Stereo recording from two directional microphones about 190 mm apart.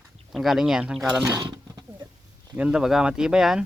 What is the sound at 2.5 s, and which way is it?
Speech, 5° right (ahead or behind).